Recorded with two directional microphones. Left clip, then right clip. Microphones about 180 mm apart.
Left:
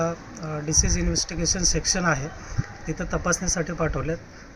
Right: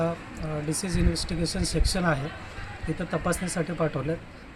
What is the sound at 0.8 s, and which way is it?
Speech, 5° left (ahead or behind).